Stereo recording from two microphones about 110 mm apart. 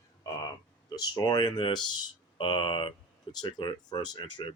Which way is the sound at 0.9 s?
35° left (ahead or behind).